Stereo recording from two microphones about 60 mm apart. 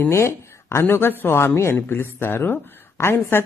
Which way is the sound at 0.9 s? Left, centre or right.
Left.